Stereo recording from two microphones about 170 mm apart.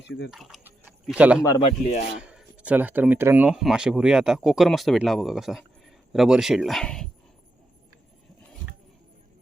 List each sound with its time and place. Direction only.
0.3 s speech: centre (ahead or behind)
1.6 s speech: 45° left (ahead or behind)
2.2 s speech: 5° right (ahead or behind)